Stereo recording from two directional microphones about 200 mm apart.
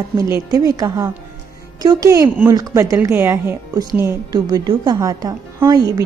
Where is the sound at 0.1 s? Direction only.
15° right (ahead or behind).